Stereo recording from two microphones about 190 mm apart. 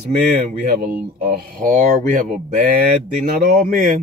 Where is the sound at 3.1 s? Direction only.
40° right (ahead or behind).